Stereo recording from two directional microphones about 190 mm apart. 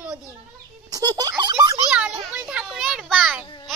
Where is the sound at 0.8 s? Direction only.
20° right (ahead or behind).